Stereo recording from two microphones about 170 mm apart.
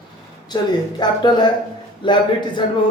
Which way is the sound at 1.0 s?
25° left (ahead or behind).